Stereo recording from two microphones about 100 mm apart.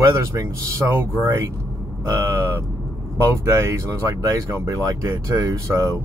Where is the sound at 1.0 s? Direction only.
30° right (ahead or behind).